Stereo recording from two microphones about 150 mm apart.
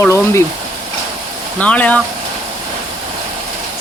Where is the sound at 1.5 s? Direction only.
10° left (ahead or behind).